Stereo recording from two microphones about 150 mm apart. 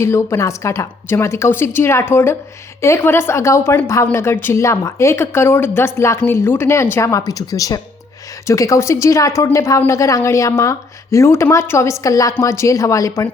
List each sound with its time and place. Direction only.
0.0 s a woman's voice: 20° left (ahead or behind)